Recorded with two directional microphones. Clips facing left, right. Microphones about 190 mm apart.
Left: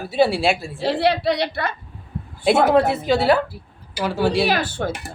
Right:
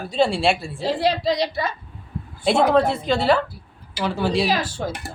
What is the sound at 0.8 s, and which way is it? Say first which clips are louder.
Speech: left 2 dB; 65° left (ahead or behind).